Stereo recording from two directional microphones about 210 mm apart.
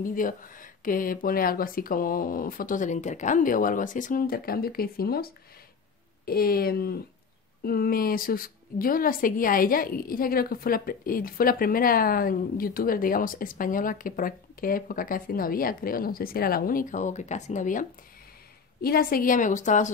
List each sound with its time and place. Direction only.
0.0 s a woman's voice: 40° left (ahead or behind)